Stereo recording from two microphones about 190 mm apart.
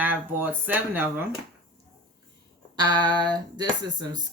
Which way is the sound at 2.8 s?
25° right (ahead or behind).